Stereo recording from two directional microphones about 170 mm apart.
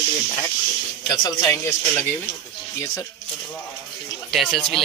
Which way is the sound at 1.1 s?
25° left (ahead or behind).